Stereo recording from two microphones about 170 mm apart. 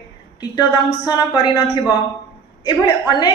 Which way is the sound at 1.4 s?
25° left (ahead or behind).